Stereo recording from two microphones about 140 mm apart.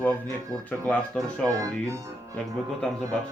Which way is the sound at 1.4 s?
25° right (ahead or behind).